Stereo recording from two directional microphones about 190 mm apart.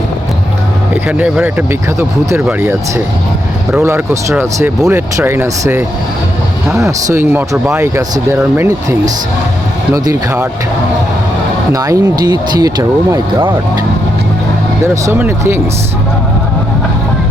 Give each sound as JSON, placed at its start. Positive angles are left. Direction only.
{"t": 1.0, "sound": "speech", "side_deg": -5}
{"t": 6.8, "sound": "speech", "side_deg": -15}
{"t": 11.7, "sound": "speech", "side_deg": -20}
{"t": 15.0, "sound": "speech", "side_deg": -10}